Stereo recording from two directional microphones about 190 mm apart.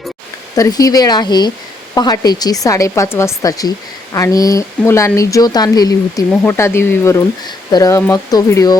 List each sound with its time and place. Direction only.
0.5 s a woman's voice: 20° left (ahead or behind)